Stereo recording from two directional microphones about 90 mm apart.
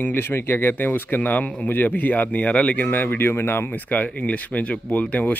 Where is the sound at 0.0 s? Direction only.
25° left (ahead or behind).